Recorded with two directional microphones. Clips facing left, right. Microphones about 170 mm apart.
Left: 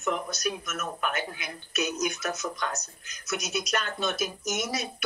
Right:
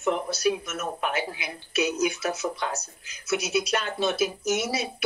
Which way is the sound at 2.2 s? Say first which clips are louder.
Right 3 dB; 30° right (ahead or behind).